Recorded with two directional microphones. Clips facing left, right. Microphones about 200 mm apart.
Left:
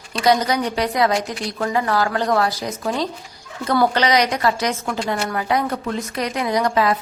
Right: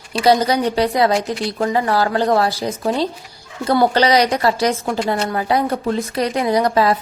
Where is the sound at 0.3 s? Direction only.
30° right (ahead or behind).